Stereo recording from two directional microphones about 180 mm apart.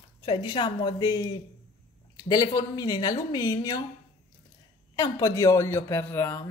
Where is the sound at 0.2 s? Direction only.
25° left (ahead or behind).